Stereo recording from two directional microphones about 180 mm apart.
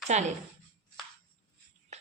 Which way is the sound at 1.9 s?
40° right (ahead or behind).